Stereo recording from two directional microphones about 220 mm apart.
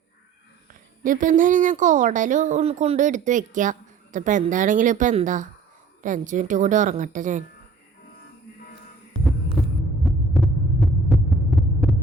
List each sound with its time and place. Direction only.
0.7 s a woman's voice: 35° right (ahead or behind)
10.0 s hum: centre (ahead or behind)